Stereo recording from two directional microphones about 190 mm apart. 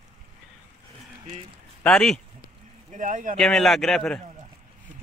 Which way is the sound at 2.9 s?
40° right (ahead or behind).